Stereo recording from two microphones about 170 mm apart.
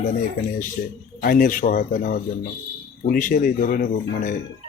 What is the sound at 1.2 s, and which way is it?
A man's voice, 55° left (ahead or behind).